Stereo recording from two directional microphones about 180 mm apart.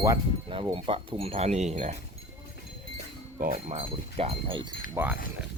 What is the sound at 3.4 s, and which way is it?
Speech, 45° right (ahead or behind).